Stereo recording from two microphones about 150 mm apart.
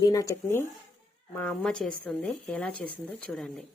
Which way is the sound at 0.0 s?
25° left (ahead or behind).